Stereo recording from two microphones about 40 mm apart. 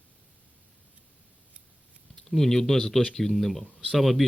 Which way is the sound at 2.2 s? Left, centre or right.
Centre.